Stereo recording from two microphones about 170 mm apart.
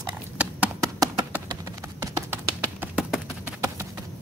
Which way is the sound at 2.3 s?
10° right (ahead or behind).